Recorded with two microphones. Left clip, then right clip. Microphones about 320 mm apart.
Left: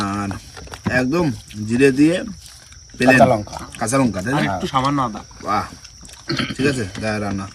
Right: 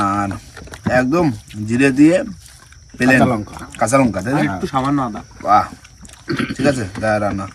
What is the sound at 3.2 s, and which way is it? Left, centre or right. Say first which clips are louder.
Speech: left 3 dB; left.